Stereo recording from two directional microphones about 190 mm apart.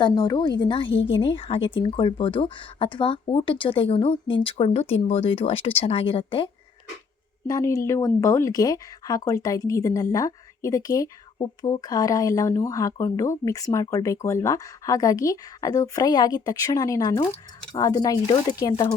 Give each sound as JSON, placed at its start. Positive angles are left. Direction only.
{"t": 0.0, "sound": "speech", "side_deg": 20}